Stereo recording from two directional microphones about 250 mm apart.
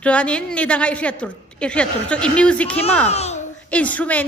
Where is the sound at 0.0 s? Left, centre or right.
Centre.